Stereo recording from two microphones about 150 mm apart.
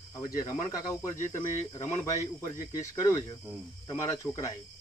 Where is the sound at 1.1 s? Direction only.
55° left (ahead or behind).